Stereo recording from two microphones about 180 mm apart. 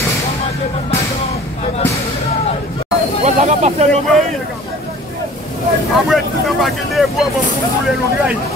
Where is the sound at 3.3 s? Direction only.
40° right (ahead or behind).